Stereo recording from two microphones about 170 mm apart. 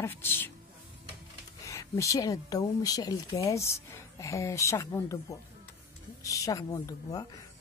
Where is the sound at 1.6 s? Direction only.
15° left (ahead or behind).